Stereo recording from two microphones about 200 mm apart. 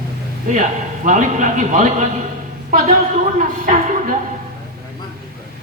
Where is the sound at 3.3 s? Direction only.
40° right (ahead or behind).